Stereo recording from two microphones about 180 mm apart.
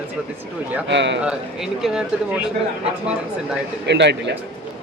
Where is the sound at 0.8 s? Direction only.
80° right.